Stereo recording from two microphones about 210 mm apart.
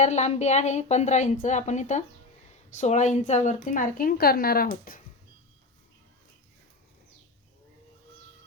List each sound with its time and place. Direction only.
0.0 s a woman's voice: 35° left (ahead or behind)